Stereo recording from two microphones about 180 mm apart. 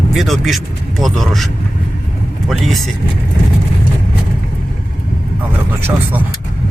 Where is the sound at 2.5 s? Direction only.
Centre (ahead or behind).